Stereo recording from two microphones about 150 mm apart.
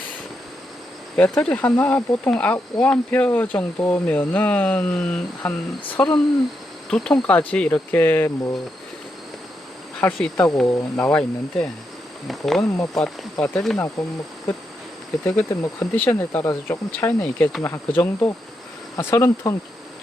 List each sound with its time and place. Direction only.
1.1 s speech: 10° left (ahead or behind)
10.0 s speech: 5° left (ahead or behind)
15.2 s speech: 15° left (ahead or behind)